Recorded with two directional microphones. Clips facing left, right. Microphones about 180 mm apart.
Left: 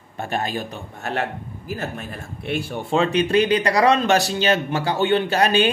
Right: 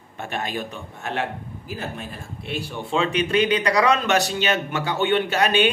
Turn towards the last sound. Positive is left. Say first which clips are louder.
# left 2 dB
turn(degrees=35)  # may be behind; listen again after turning